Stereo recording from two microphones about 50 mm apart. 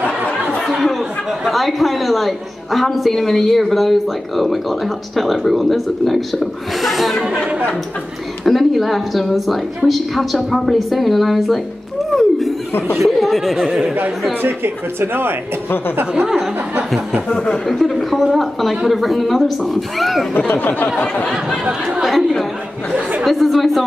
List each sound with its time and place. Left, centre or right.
0.6 s chatter: centre
0.9 s speech: centre
8.5 s speech: centre
12.2 s laughter: centre
12.9 s speech: centre
13.7 s speech: centre
14.4 s speech: right
17.3 s speech: centre
17.7 s speech: centre
20.4 s a sound: left
22.0 s speech: centre